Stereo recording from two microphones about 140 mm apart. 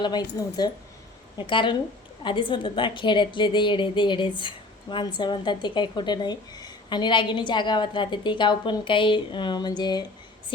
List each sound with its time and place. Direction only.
0.0 s a woman's voice: 30° left (ahead or behind)